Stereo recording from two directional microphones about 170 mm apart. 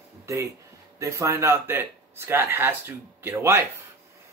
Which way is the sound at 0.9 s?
20° right (ahead or behind).